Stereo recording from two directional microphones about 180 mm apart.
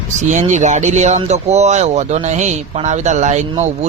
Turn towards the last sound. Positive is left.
turn(degrees=-40)  # may be behind; listen again after turning